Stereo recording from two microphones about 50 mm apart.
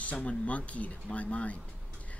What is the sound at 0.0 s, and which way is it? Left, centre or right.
Speech, left.